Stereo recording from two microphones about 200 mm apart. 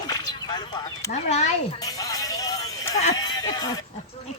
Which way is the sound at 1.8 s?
15° left (ahead or behind).